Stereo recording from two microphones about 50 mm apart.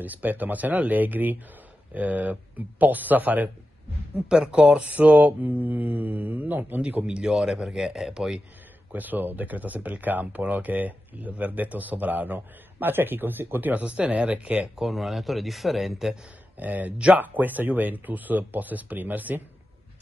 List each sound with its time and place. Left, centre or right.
0.0 s speech: right
4.3 s speech: centre; by 6.8 s right
6.8 s speech: right
8.9 s speech: right
13.8 s speech: right
14.8 s speech: centre
16.5 s speech: right